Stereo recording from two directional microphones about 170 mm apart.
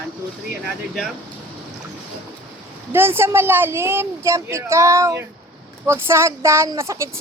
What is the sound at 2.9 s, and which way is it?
Speech, 15° right (ahead or behind).